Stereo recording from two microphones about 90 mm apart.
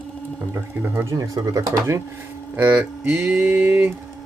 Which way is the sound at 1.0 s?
35° right (ahead or behind).